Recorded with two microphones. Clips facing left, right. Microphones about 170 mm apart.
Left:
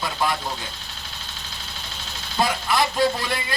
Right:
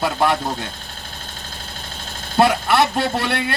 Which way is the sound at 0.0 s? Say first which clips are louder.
Right 6 dB; 65° right (ahead or behind).